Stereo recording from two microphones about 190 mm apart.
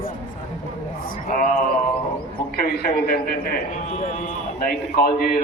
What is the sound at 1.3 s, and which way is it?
A man's voice, 50° left (ahead or behind).